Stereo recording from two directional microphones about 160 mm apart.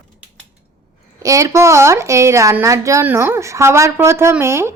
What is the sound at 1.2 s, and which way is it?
A woman's voice, 20° right (ahead or behind).